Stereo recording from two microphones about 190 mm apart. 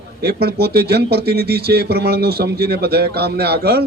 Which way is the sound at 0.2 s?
55° right (ahead or behind).